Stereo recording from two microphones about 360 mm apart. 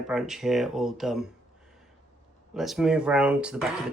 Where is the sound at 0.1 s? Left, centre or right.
Centre.